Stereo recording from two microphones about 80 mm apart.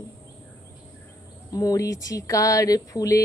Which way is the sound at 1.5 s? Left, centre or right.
Left.